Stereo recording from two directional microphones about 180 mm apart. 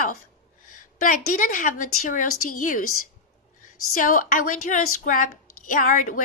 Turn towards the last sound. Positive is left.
turn(degrees=45)  # may be behind; listen again after turning